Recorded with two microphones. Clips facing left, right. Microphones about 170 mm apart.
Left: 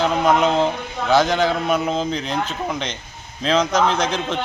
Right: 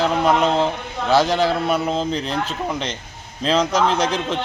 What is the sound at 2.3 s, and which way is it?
Speech, 35° right (ahead or behind).